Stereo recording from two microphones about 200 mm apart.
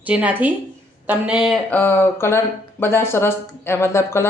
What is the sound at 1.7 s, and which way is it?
Speech, 10° left (ahead or behind).